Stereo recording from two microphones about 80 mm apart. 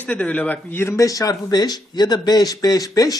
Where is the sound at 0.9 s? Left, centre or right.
Left.